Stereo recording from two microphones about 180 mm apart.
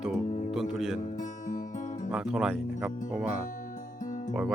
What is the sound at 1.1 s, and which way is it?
Music, 45° left (ahead or behind).